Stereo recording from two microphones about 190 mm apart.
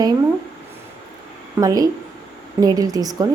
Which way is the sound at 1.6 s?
20° right (ahead or behind).